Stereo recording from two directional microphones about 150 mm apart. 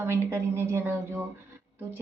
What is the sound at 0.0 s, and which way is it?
A woman's voice, 15° right (ahead or behind).